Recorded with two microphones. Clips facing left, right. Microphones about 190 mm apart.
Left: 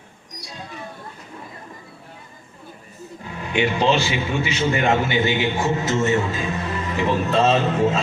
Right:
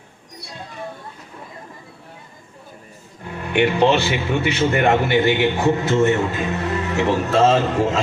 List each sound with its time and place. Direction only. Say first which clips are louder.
3.2 s a man's voice: right 3 dB; 60° right (ahead or behind); by 7.4 s 75° right (ahead or behind)